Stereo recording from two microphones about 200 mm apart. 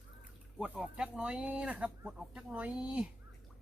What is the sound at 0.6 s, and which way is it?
Speech, 5° right (ahead or behind).